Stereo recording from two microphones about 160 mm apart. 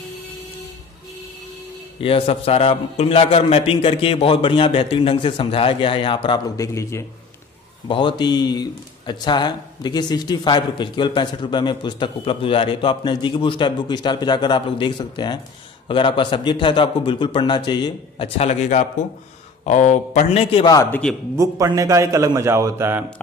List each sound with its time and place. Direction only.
2.0 s a man's voice: 35° left (ahead or behind); by 7.1 s 20° left (ahead or behind)
7.9 s a man's voice: 30° left (ahead or behind)
18.4 s a man's voice: 45° left (ahead or behind)
20.6 s a man's voice: 20° left (ahead or behind)
21.4 s a man's voice: 20° right (ahead or behind)